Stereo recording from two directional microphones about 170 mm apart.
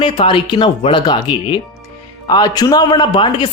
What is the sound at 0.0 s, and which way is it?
Speech, 30° left (ahead or behind).